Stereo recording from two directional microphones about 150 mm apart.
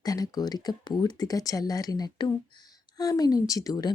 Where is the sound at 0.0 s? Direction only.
25° left (ahead or behind).